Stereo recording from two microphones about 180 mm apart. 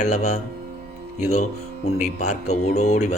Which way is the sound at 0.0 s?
40° left (ahead or behind).